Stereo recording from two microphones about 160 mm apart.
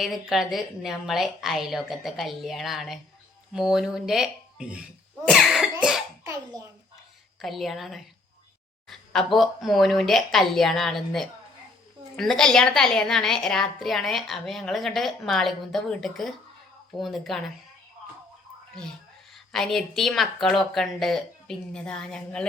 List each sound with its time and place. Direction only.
0.0 s a woman's voice: centre (ahead or behind)
5.3 s cough: centre (ahead or behind)
6.2 s a child's voice: 20° right (ahead or behind)
7.3 s a woman's voice: centre (ahead or behind)
19.3 s a woman's voice: centre (ahead or behind)